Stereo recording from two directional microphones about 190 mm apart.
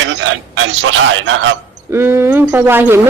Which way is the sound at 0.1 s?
75° right (ahead or behind).